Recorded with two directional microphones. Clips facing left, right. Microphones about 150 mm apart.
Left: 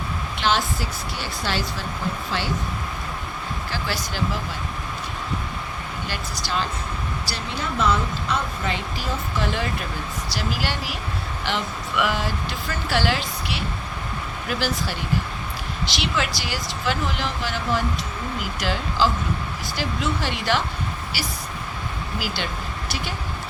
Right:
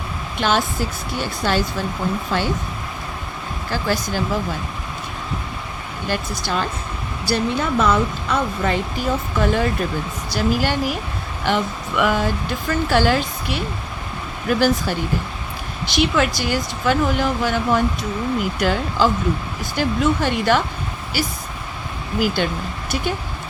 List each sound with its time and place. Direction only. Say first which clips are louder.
0.3 s a woman's voice: right 4 dB; 50° right (ahead or behind)
3.7 s speech: right 9 dB; 45° right (ahead or behind)
6.1 s speech: right 8 dB; 50° right (ahead or behind)